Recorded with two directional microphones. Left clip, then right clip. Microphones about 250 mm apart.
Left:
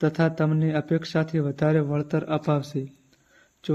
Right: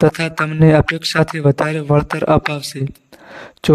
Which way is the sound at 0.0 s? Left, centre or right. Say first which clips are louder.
Right 8 dB; right.